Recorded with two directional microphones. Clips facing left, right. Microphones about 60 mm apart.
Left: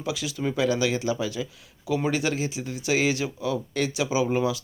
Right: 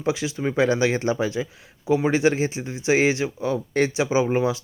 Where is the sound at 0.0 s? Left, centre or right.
Right.